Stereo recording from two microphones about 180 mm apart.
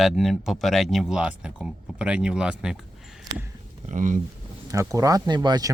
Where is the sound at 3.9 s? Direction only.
45° right (ahead or behind).